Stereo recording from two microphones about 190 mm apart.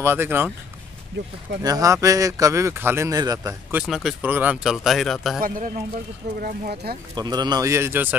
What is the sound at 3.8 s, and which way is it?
Speech, centre (ahead or behind).